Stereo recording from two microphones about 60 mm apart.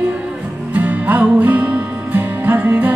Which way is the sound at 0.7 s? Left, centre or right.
Right.